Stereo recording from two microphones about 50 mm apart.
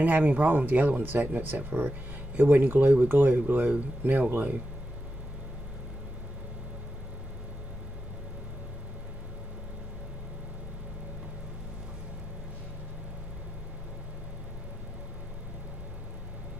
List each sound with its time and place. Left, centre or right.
0.0 s speech: right